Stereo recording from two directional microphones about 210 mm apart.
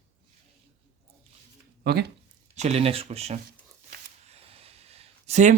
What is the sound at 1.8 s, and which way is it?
Speech, 50° right (ahead or behind).